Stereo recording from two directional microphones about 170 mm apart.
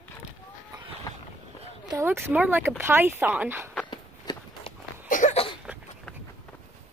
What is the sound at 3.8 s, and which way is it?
Walk, 25° left (ahead or behind).